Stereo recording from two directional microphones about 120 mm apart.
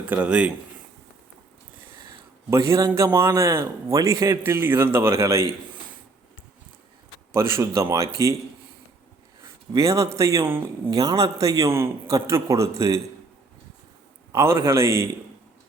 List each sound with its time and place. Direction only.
0.0 s speech: 15° right (ahead or behind)
2.5 s a man's voice: 25° right (ahead or behind)
7.3 s a man's voice: 25° right (ahead or behind)
9.7 s a man's voice: 25° right (ahead or behind)
14.3 s a man's voice: 25° right (ahead or behind)